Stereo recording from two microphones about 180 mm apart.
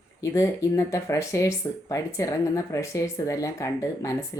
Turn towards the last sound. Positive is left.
turn(degrees=20)  # may be behind; listen again after turning